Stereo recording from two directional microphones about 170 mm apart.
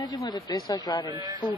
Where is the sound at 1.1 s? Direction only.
20° right (ahead or behind).